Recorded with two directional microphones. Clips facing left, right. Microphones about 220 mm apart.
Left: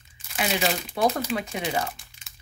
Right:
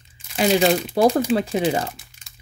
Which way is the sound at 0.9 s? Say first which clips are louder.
Right 8 dB; 35° right (ahead or behind).